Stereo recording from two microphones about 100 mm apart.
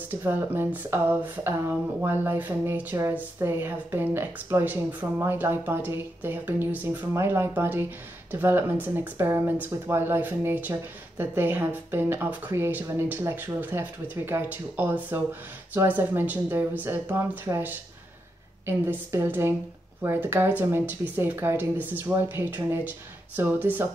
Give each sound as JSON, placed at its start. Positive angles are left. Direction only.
{"t": 0.1, "sound": "speech", "side_deg": -20}